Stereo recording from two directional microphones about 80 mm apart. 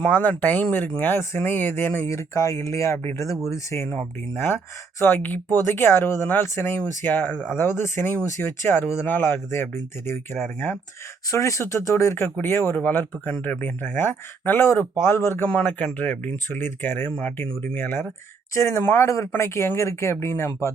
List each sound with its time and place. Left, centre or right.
0.0 s speech: left
2.0 s speech: left
3.9 s speech: left
11.3 s speech: left
15.4 s speech: centre